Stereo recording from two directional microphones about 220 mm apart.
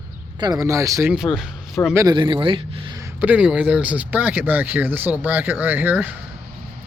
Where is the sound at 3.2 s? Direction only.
5° right (ahead or behind).